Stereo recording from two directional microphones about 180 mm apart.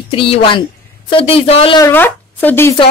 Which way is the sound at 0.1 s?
30° left (ahead or behind).